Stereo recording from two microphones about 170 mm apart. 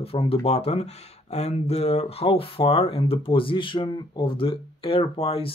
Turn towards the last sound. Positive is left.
turn(degrees=35)  # may be behind; listen again after turning